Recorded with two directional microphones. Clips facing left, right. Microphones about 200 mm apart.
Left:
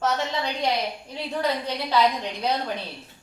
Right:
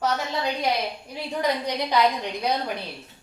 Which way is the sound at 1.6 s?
15° right (ahead or behind).